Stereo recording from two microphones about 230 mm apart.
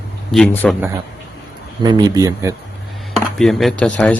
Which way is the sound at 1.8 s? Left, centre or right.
Centre.